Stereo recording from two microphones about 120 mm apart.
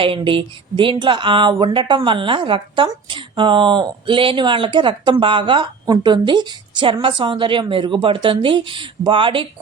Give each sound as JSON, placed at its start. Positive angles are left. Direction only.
{"t": 0.0, "sound": "speech", "side_deg": -45}